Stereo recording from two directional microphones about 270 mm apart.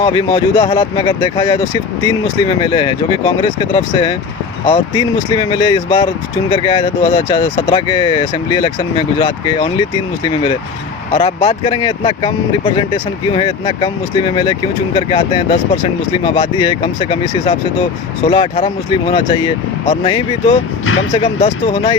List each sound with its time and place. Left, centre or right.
0.0 s speech: centre
11.1 s speech: centre
20.8 s speech: left
21.4 s speech: centre